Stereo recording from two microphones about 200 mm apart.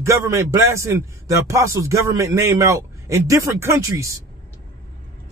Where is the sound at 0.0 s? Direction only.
15° right (ahead or behind).